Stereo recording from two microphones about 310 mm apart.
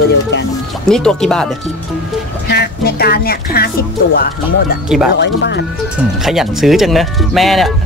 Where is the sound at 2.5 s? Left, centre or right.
Left.